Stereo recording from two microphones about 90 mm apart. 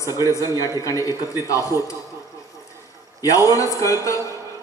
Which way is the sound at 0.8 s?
35° left (ahead or behind).